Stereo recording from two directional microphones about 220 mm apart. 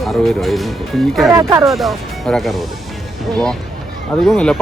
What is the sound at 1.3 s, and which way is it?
Speech, 15° right (ahead or behind).